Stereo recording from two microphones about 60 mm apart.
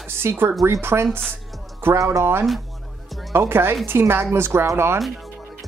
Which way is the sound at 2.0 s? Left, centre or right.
Right.